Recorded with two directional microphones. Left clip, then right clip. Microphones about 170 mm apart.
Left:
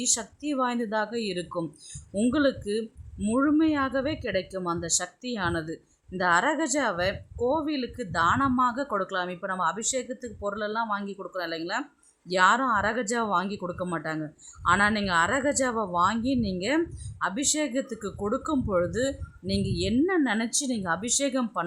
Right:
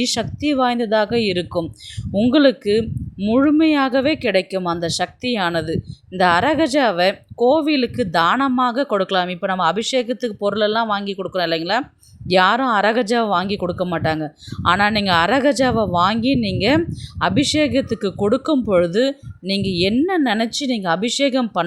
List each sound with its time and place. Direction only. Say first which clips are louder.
0.0 s speech: right 9 dB; 25° right (ahead or behind)